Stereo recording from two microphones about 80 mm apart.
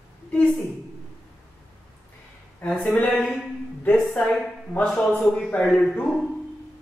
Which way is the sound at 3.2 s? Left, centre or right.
Centre.